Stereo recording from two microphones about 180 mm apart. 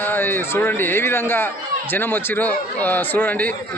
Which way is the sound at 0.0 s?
10° left (ahead or behind).